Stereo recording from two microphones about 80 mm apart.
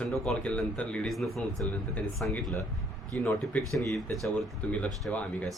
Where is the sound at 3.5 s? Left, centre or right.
Centre.